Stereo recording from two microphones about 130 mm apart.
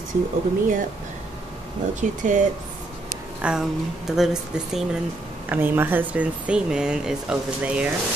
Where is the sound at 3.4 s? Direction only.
10° right (ahead or behind).